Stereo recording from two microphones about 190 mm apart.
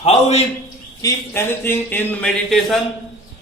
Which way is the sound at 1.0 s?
15° left (ahead or behind).